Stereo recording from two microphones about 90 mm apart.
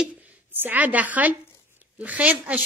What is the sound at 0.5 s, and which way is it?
A woman's voice, 20° right (ahead or behind).